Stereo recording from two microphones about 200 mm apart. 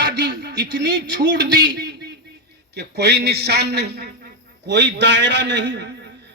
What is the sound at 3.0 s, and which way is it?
A man's voice, 55° right (ahead or behind).